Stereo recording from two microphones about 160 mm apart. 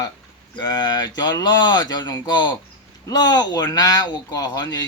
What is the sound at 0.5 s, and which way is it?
Speech, 25° left (ahead or behind).